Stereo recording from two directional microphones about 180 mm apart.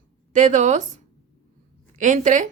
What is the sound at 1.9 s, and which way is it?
Speech, 45° right (ahead or behind).